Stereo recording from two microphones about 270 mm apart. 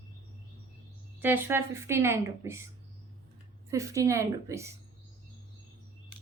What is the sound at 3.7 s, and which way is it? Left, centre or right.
Speech, centre.